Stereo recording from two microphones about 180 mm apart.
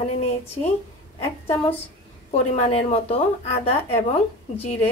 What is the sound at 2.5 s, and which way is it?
Speech, 35° left (ahead or behind).